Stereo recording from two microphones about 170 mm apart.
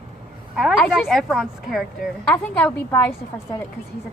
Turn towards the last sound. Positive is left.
turn(degrees=15)  # may be behind; listen again after turning